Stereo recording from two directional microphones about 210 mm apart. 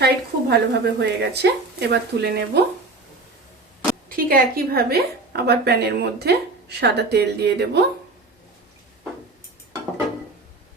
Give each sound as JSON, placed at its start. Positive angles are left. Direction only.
{"t": 0.0, "sound": "a woman's voice", "side_deg": -50}
{"t": 4.1, "sound": "a woman's voice", "side_deg": -45}